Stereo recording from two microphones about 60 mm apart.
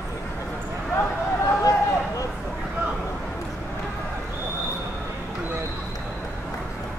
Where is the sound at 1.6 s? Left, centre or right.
Left.